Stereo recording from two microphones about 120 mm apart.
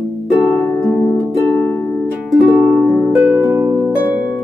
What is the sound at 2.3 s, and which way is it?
Music, centre (ahead or behind).